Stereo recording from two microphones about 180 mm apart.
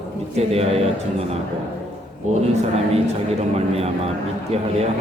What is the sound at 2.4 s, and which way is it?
Speech, 35° right (ahead or behind).